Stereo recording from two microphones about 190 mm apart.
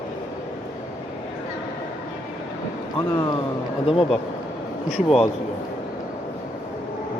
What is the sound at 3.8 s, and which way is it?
Speech, 30° left (ahead or behind).